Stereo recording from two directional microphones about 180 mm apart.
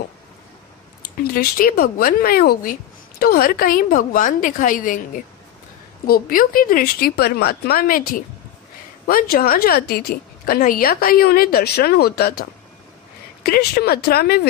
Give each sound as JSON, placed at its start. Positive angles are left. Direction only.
{"t": 1.2, "sound": "a woman's voice", "side_deg": 55}